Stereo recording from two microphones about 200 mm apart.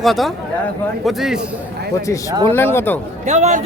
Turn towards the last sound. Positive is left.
turn(degrees=-35)  # may be behind; listen again after turning